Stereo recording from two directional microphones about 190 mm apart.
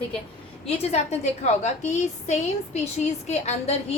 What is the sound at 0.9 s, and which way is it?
A woman's voice, 35° left (ahead or behind).